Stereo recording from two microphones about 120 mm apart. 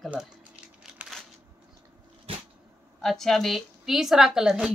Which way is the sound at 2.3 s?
50° right (ahead or behind).